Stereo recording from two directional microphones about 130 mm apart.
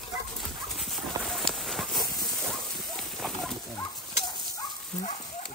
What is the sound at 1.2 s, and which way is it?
Run, 5° left (ahead or behind).